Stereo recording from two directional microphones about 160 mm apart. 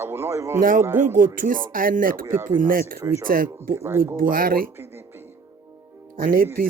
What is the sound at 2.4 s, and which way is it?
Speech, 55° right (ahead or behind).